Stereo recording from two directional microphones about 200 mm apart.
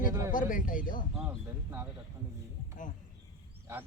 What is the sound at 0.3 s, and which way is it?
Speech, 40° left (ahead or behind).